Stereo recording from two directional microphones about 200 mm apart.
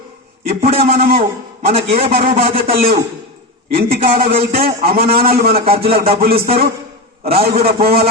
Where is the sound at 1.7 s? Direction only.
30° right (ahead or behind).